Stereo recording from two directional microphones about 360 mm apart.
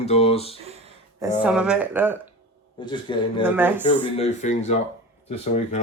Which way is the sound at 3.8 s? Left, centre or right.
Centre.